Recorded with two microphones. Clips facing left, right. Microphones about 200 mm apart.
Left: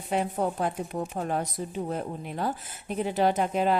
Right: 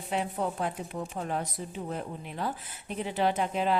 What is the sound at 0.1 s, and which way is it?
A woman's voice, 45° left (ahead or behind).